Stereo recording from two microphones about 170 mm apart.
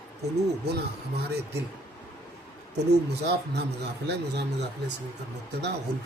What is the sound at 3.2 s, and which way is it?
Speech, 75° right (ahead or behind).